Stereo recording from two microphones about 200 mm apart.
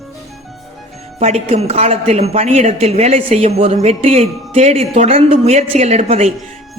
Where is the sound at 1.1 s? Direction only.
30° right (ahead or behind).